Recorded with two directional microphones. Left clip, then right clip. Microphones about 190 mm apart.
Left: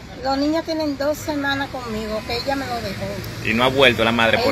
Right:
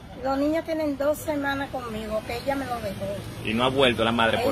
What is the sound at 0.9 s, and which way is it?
Speech, 5° right (ahead or behind).